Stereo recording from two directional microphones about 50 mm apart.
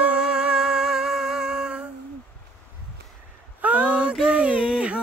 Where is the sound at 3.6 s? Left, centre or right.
Right.